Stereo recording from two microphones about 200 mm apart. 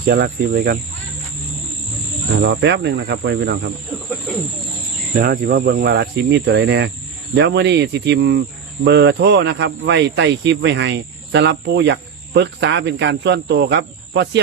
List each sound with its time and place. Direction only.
0.0 s speech: 55° right (ahead or behind)
2.4 s speech: 60° right (ahead or behind)
5.1 s speech: 45° right (ahead or behind); by 14.4 s 60° right (ahead or behind)